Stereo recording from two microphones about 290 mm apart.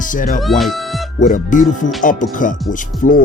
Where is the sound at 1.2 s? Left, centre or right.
Left.